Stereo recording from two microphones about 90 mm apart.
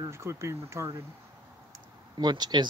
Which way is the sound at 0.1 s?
30° right (ahead or behind).